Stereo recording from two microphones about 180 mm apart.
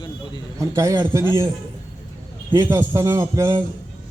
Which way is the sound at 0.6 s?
20° right (ahead or behind).